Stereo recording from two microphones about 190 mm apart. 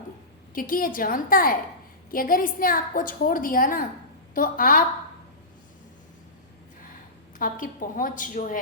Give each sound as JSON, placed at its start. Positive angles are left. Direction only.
{"t": 0.5, "sound": "a woman's voice", "side_deg": 50}
{"t": 7.3, "sound": "a woman's voice", "side_deg": 45}